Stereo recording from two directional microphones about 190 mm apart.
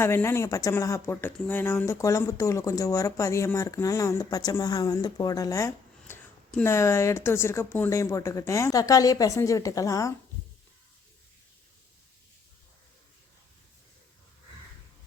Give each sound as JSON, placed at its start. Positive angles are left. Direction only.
{"t": 0.0, "sound": "speech", "side_deg": 15}